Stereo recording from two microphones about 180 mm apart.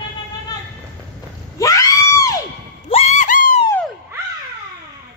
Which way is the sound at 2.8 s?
35° left (ahead or behind).